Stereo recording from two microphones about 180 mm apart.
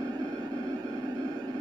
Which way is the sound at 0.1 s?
20° right (ahead or behind).